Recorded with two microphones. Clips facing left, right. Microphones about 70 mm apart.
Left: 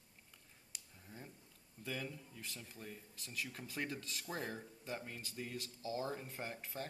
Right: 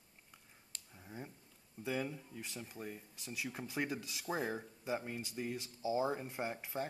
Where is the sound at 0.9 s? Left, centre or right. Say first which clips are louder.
Right 6 dB; right.